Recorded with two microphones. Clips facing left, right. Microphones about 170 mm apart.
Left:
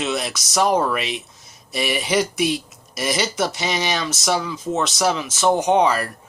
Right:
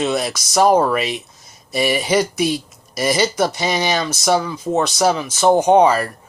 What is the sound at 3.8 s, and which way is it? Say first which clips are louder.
Speech: right 4 dB; 50° right (ahead or behind).